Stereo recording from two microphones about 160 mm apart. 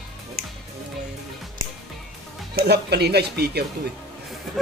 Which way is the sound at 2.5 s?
85° right.